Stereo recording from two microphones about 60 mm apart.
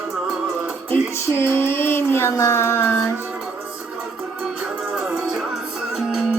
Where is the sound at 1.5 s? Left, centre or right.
Left.